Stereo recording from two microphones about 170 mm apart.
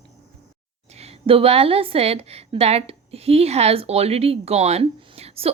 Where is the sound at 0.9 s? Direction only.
35° right (ahead or behind).